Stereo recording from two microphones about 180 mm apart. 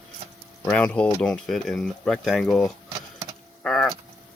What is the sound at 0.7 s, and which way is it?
Speech, 5° left (ahead or behind).